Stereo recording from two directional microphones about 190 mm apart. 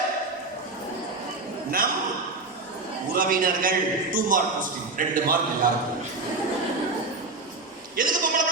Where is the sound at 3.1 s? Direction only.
50° right (ahead or behind).